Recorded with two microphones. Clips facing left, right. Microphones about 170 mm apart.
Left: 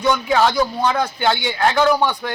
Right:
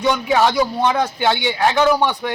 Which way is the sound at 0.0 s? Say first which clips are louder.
Even; 10° right (ahead or behind).